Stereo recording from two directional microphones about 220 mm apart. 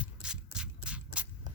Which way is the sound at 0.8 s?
5° right (ahead or behind).